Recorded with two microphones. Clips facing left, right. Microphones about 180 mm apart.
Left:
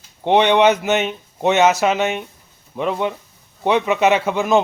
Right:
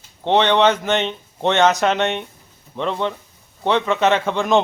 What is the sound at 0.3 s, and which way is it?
A man's voice, 10° left (ahead or behind).